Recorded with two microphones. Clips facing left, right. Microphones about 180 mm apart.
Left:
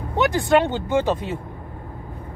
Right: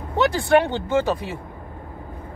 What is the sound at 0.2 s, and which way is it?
Speech, 20° left (ahead or behind).